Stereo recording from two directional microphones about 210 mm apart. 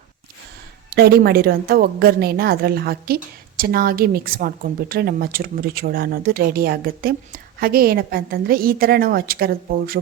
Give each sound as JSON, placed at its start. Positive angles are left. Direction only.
{"t": 0.9, "sound": "a woman's voice", "side_deg": -50}